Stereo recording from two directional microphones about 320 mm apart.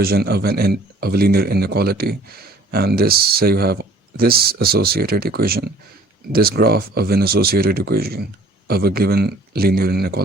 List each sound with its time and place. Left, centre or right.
0.0 s speech: right